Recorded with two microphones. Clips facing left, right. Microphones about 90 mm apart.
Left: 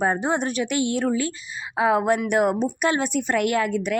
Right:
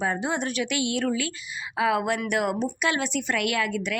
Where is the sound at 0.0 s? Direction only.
40° left (ahead or behind).